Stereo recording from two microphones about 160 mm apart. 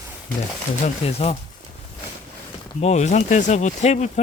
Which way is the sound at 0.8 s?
40° left (ahead or behind).